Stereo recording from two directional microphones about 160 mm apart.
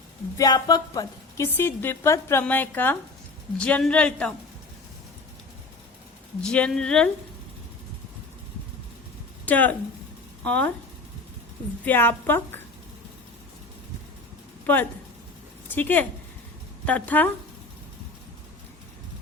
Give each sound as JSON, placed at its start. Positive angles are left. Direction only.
{"t": 0.3, "sound": "speech", "side_deg": 25}
{"t": 1.5, "sound": "a woman's voice", "side_deg": 15}
{"t": 6.4, "sound": "speech", "side_deg": 5}
{"t": 9.5, "sound": "a woman's voice", "side_deg": 10}
{"t": 11.9, "sound": "a woman's voice", "side_deg": 15}
{"t": 14.7, "sound": "a woman's voice", "side_deg": 10}